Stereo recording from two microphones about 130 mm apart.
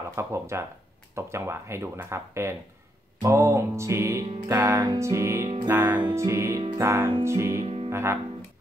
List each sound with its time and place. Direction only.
0.1 s music: 20° right (ahead or behind)
7.6 s music: 50° right (ahead or behind)
7.9 s speech: 20° right (ahead or behind)